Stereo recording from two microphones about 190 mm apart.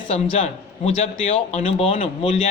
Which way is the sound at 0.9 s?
35° left (ahead or behind).